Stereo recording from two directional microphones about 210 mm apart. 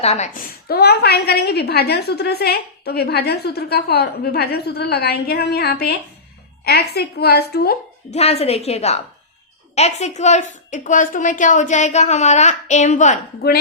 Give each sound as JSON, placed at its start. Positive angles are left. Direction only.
{"t": 0.0, "sound": "a woman's voice", "side_deg": 30}
{"t": 8.1, "sound": "a woman's voice", "side_deg": 30}